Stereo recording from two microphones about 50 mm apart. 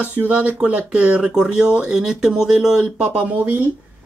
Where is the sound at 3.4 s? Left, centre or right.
Right.